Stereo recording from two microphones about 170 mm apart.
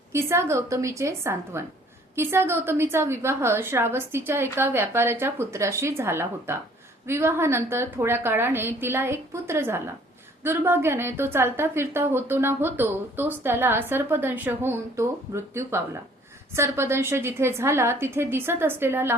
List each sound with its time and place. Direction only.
0.1 s a woman's voice: 15° right (ahead or behind)